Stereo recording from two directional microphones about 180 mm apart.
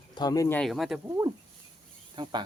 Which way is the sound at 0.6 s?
Centre (ahead or behind).